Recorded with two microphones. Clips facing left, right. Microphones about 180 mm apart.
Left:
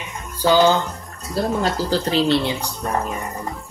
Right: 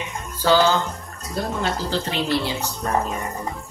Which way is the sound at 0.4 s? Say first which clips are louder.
Left 3 dB; 15° left (ahead or behind).